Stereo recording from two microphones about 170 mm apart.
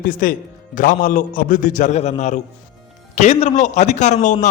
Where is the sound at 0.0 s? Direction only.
55° left (ahead or behind).